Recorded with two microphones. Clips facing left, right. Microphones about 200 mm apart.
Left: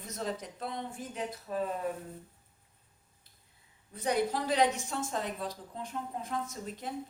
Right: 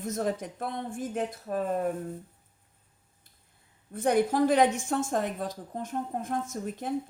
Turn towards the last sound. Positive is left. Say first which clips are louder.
# right 6 dB
turn(degrees=-50)  # may be behind; listen again after turning